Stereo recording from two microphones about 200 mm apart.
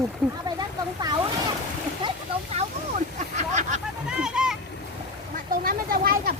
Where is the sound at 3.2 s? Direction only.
35° right (ahead or behind).